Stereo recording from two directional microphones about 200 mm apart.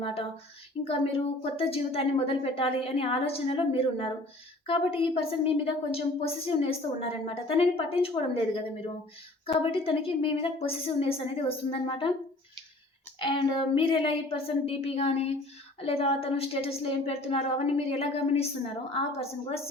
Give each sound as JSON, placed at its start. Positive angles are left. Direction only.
{"t": 0.0, "sound": "a woman's voice", "side_deg": 30}
{"t": 1.5, "sound": "a woman's voice", "side_deg": 30}
{"t": 13.1, "sound": "a woman's voice", "side_deg": 25}